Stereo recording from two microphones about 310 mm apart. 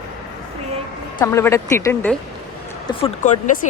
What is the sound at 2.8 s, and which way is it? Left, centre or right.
Speech, left.